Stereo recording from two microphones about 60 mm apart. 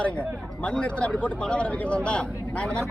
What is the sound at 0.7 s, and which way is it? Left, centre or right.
Speech, centre.